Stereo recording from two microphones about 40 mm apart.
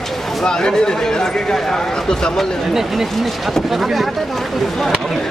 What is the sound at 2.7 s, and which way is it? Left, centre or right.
Speech, centre.